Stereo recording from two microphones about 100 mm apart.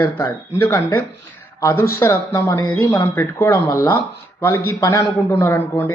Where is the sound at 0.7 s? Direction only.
25° left (ahead or behind).